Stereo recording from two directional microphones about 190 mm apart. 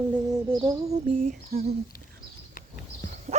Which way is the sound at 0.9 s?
40° right (ahead or behind).